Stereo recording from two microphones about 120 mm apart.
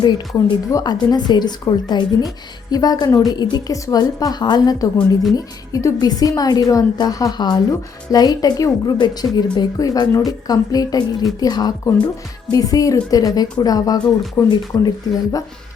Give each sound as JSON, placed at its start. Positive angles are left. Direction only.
{"t": 0.0, "sound": "speech", "side_deg": 35}